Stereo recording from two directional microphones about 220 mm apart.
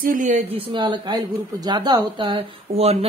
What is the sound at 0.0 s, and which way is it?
Speech, 40° right (ahead or behind).